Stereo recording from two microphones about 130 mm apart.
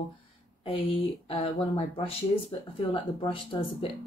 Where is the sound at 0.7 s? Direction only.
45° left (ahead or behind).